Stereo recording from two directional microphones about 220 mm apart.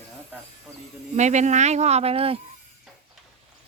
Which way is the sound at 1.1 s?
30° right (ahead or behind).